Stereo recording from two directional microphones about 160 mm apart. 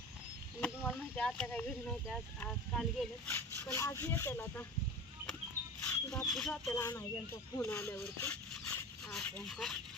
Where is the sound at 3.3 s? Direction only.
15° left (ahead or behind).